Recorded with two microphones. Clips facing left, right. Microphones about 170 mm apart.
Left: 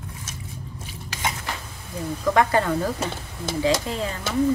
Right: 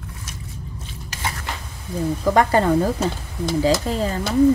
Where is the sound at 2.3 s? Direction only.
35° right (ahead or behind).